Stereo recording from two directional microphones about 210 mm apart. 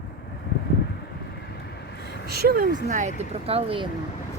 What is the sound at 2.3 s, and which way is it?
Speech, 50° right (ahead or behind).